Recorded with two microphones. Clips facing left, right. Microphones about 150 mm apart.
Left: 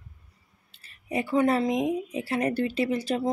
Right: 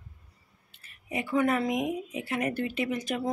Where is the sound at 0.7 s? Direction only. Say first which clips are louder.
Left 4 dB; 35° left (ahead or behind).